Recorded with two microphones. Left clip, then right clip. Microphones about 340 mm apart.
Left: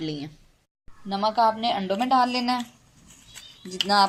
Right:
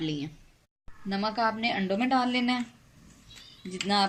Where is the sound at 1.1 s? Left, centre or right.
Left.